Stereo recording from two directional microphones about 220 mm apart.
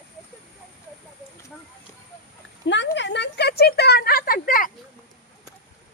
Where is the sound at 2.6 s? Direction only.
55° left (ahead or behind).